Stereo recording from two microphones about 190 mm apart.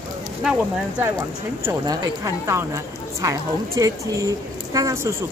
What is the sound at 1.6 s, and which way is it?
Speech, 15° right (ahead or behind).